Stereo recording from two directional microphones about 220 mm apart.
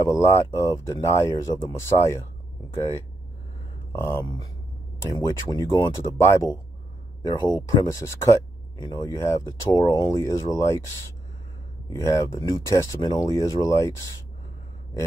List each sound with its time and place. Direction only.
0.0 s speech: 10° left (ahead or behind)
3.9 s speech: 10° left (ahead or behind)
11.9 s speech: 15° left (ahead or behind)